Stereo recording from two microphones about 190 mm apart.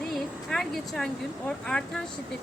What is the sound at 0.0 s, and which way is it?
Speech, centre (ahead or behind).